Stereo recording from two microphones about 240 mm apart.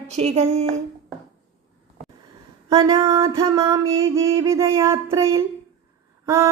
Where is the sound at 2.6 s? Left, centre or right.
Centre.